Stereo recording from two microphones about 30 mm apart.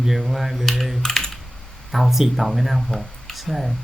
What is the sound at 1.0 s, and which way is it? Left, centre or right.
Typing, centre.